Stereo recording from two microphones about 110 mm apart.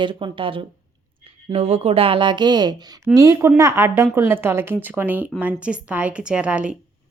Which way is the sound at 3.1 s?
30° right (ahead or behind).